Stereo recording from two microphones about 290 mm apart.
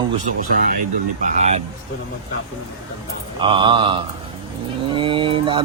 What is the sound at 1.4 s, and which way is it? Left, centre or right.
Speech, right.